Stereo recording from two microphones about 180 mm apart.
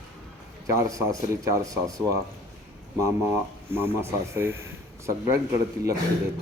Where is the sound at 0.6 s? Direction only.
20° right (ahead or behind).